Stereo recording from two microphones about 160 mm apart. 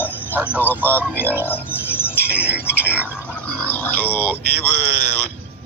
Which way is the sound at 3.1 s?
10° left (ahead or behind).